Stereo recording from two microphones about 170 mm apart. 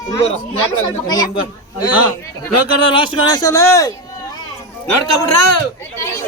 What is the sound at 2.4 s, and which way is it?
Speech, 30° left (ahead or behind).